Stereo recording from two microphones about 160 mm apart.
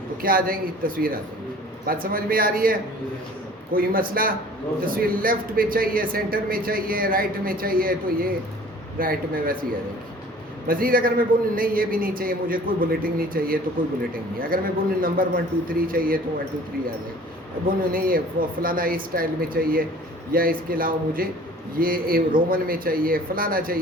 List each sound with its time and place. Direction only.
0.2 s a man's voice: 65° right (ahead or behind)
10.7 s a man's voice: 65° right (ahead or behind)
17.7 s a man's voice: 65° right (ahead or behind)